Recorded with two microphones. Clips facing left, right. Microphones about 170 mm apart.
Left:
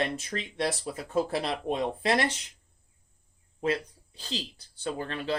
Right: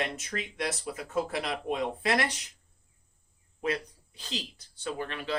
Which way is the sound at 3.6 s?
30° left (ahead or behind).